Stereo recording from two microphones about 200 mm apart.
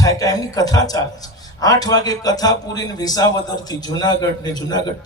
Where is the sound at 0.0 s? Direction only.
15° left (ahead or behind).